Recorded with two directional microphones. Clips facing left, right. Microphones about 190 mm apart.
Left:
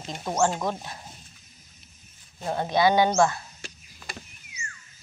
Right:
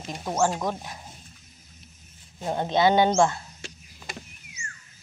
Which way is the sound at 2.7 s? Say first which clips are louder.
Right 1 dB; 20° right (ahead or behind).